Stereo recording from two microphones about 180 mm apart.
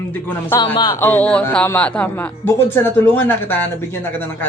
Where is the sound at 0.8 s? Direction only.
15° left (ahead or behind).